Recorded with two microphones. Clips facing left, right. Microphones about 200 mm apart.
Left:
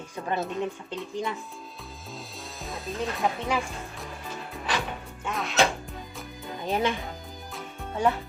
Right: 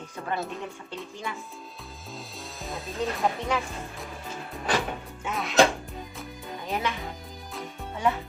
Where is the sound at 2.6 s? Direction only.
Centre (ahead or behind).